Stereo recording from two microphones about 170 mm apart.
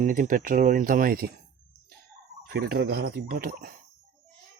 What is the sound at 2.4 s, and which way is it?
Speech, 65° right (ahead or behind).